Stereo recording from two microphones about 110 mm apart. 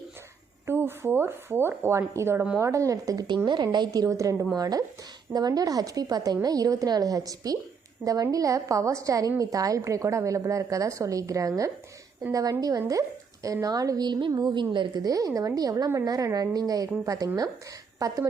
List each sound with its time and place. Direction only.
0.7 s a woman's voice: 20° right (ahead or behind)